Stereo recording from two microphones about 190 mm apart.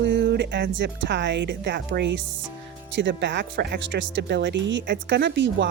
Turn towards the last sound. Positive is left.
turn(degrees=-65)  # may be behind; listen again after turning